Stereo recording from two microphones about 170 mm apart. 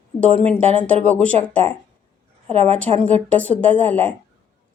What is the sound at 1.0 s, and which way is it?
Speech, 40° right (ahead or behind).